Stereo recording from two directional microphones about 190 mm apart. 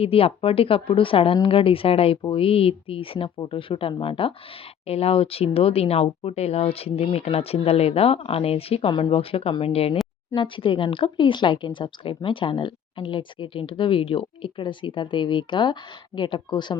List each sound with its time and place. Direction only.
0.0 s speech: 30° left (ahead or behind)